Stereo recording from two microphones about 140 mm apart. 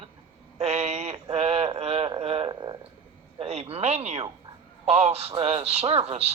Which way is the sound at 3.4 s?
45° right (ahead or behind).